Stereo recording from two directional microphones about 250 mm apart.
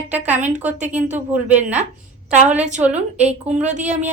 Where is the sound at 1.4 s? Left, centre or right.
Centre.